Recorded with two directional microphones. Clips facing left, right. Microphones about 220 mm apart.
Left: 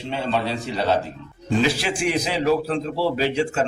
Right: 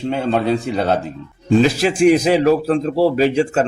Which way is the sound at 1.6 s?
40° right (ahead or behind).